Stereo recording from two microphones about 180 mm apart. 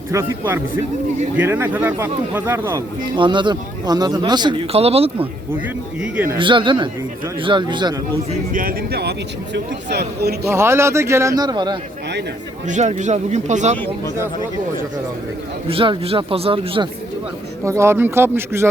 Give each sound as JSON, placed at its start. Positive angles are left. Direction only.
{"t": 0.1, "sound": "speech", "side_deg": -15}
{"t": 3.2, "sound": "speech", "side_deg": -25}
{"t": 6.0, "sound": "speech", "side_deg": -10}
{"t": 6.4, "sound": "speech", "side_deg": -25}
{"t": 8.3, "sound": "speech", "side_deg": -50}
{"t": 10.5, "sound": "speech", "side_deg": -15}
{"t": 12.6, "sound": "speech", "side_deg": -40}
{"t": 15.7, "sound": "speech", "side_deg": -30}
{"t": 17.7, "sound": "speech", "side_deg": -15}